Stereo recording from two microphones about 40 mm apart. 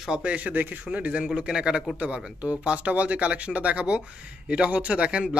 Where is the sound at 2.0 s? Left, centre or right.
Right.